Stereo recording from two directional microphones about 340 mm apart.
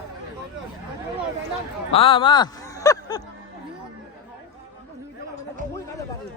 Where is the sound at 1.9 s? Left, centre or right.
Centre.